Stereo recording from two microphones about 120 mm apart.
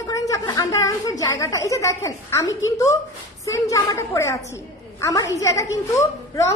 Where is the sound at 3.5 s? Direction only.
30° left (ahead or behind).